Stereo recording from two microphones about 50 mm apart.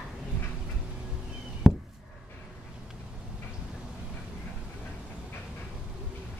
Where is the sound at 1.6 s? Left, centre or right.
Centre.